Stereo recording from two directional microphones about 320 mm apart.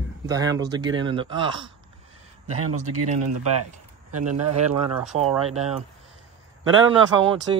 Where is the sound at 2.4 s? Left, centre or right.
Right.